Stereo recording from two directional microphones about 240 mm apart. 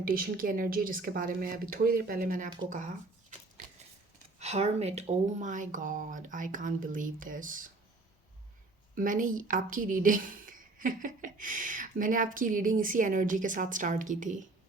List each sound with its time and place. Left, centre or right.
0.0 s a woman's voice: right
4.4 s a woman's voice: right
9.0 s a woman's voice: right